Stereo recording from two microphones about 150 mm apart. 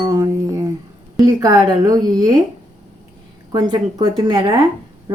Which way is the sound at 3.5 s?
30° right (ahead or behind).